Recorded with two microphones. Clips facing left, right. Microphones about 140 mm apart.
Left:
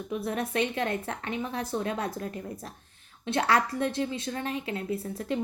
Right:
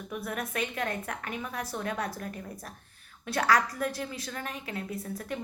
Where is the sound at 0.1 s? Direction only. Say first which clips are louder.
Left 5 dB; 30° left (ahead or behind).